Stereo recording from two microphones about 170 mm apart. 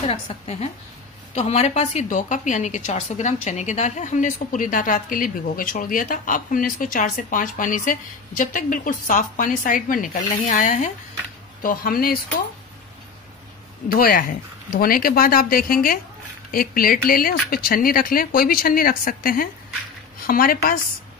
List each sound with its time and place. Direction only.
0.1 s a woman's voice: 35° left (ahead or behind); by 12.2 s 60° left (ahead or behind)
13.8 s speech: 55° left (ahead or behind)